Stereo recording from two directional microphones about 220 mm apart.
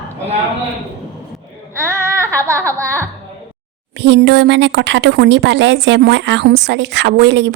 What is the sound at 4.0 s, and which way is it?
A woman's voice, 55° right (ahead or behind).